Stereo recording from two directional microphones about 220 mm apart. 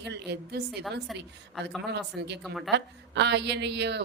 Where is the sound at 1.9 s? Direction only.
50° right (ahead or behind).